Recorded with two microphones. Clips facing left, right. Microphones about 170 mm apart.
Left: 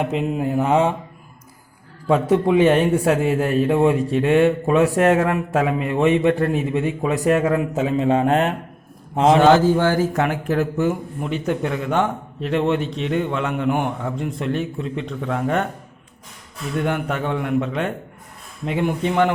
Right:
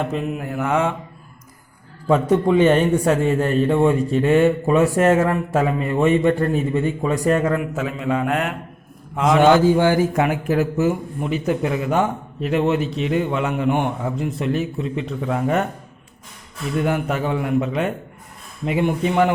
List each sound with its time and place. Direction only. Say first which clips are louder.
0.0 s speech: left 3 dB; 20° left (ahead or behind)
2.0 s speech: even; centre (ahead or behind)
7.6 s a man's voice: left 5 dB; 25° left (ahead or behind)
9.4 s speech: right 4 dB; 15° right (ahead or behind)
16.7 s speech: right 1 dB; 5° right (ahead or behind)